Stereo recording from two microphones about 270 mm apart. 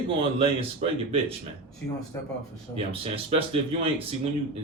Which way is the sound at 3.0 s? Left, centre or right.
Right.